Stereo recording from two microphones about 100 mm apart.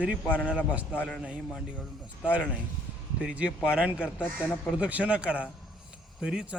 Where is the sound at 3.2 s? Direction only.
10° right (ahead or behind).